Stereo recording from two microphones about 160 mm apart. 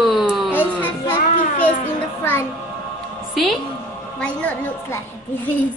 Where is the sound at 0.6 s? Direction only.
10° left (ahead or behind).